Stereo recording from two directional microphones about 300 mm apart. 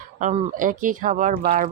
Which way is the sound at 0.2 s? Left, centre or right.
Right.